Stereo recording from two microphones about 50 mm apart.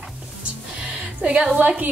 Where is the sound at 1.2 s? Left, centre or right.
Right.